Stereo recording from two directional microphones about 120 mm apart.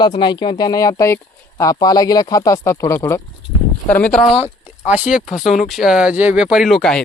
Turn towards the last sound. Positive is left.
turn(degrees=5)  # may be behind; listen again after turning